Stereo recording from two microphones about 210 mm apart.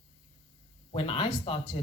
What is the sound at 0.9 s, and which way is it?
Speech, 25° left (ahead or behind).